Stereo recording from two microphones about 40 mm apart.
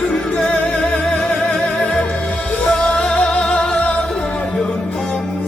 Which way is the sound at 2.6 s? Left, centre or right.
Left.